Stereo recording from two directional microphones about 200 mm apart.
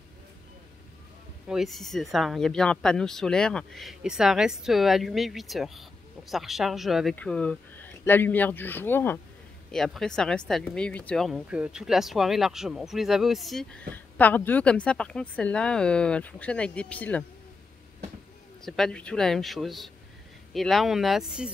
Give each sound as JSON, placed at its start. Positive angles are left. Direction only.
{"t": 1.5, "sound": "speech", "side_deg": 0}
{"t": 18.6, "sound": "speech", "side_deg": 0}